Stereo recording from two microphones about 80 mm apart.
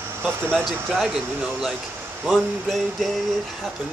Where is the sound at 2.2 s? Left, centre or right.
Centre.